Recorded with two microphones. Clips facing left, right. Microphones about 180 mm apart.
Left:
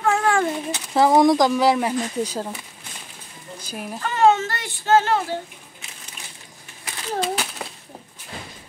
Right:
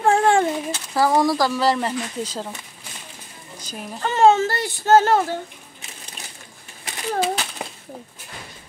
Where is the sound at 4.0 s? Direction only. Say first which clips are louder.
Right 2 dB; 30° right (ahead or behind).